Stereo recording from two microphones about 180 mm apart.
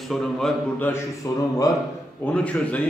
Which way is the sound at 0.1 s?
Centre (ahead or behind).